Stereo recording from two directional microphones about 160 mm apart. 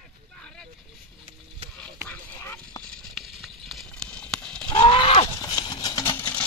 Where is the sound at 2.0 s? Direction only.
10° left (ahead or behind).